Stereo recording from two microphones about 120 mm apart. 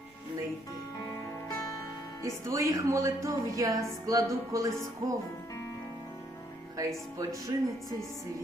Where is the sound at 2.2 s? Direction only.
25° right (ahead or behind).